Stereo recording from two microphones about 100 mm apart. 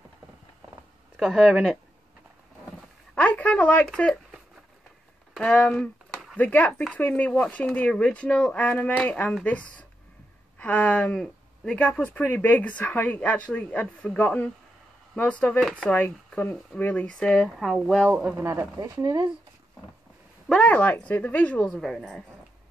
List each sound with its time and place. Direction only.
1.1 s speech: 10° right (ahead or behind)
3.2 s speech: 15° left (ahead or behind)
5.3 s speech: 10° left (ahead or behind)
18.4 s speech: 25° right (ahead or behind)
18.8 s speech: 40° right (ahead or behind)
20.4 s speech: 10° left (ahead or behind)